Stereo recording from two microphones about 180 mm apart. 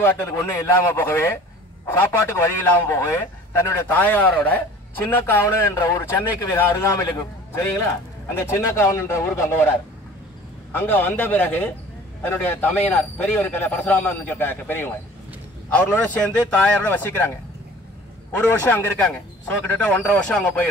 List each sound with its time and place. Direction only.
0.0 s a man's voice: 15° left (ahead or behind)
8.4 s a man's voice: 15° left (ahead or behind)
18.3 s a man's voice: 10° left (ahead or behind)